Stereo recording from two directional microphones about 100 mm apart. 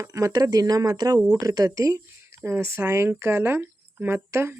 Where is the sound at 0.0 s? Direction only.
30° right (ahead or behind).